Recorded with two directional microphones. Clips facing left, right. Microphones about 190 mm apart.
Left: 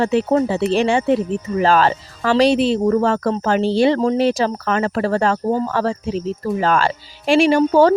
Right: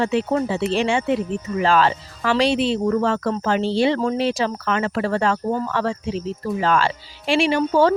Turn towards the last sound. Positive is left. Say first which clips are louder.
# left 4 dB
turn(degrees=45)  # may be behind; listen again after turning